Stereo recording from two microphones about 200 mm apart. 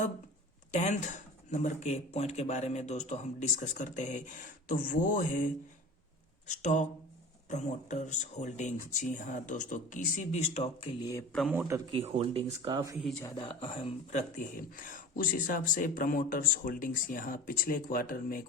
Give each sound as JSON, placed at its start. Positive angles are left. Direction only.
{"t": 0.7, "sound": "speech", "side_deg": 35}
{"t": 6.5, "sound": "speech", "side_deg": 40}
{"t": 11.3, "sound": "a man's voice", "side_deg": -5}
{"t": 12.0, "sound": "speech", "side_deg": -30}
{"t": 13.2, "sound": "speech", "side_deg": 25}